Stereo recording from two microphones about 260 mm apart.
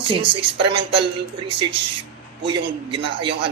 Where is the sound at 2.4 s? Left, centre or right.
Centre.